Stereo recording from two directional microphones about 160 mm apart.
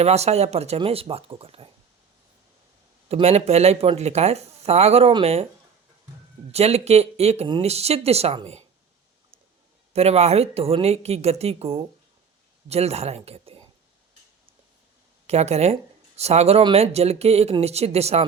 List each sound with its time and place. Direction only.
0.0 s speech: 40° right (ahead or behind)
3.1 s speech: 40° right (ahead or behind)
6.5 s speech: 40° right (ahead or behind)
9.9 s speech: 40° right (ahead or behind)
15.3 s speech: 40° right (ahead or behind)